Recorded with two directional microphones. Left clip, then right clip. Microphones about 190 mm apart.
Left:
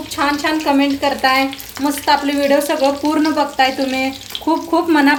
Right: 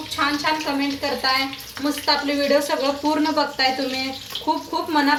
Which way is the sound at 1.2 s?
50° left (ahead or behind).